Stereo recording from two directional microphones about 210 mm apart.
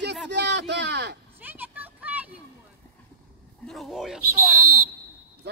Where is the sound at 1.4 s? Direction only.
10° right (ahead or behind).